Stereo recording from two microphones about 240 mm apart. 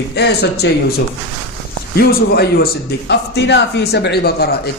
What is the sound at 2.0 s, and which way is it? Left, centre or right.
A man's voice, left.